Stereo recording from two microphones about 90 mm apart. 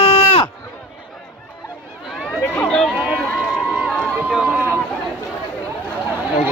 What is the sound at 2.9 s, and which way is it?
Run, 15° right (ahead or behind).